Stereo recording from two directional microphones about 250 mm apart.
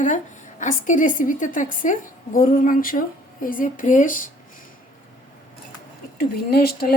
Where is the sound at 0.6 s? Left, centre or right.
Left.